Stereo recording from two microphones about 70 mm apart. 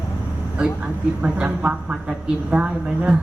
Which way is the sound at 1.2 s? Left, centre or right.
Right.